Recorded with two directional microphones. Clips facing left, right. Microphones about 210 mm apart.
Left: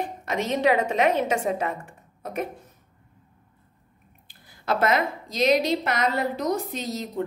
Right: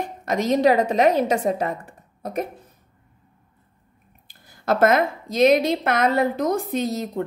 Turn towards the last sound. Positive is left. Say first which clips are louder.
# right 6 dB
turn(degrees=-50)  # may be behind; listen again after turning